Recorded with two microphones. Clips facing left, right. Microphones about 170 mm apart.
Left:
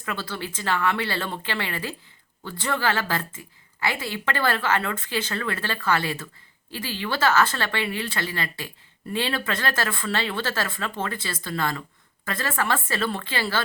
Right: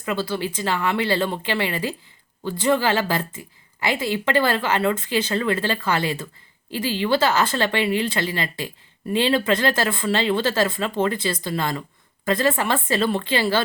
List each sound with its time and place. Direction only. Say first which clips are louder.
0.0 s speech: right 7 dB; 15° right (ahead or behind)